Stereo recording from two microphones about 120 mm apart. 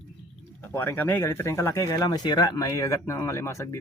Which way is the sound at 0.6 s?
15° left (ahead or behind).